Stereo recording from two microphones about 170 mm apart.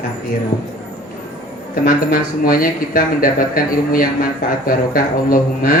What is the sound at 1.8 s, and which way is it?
Speech, 55° left (ahead or behind).